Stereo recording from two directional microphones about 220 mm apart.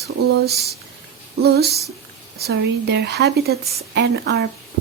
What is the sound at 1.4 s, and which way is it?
A woman's voice, 45° right (ahead or behind).